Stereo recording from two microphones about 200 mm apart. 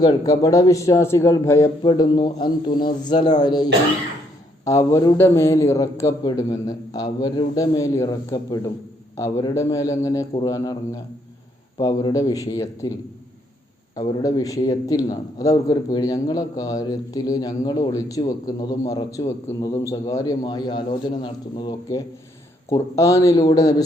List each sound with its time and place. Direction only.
0.0 s a man's voice: 20° left (ahead or behind)
13.9 s a man's voice: 20° left (ahead or behind)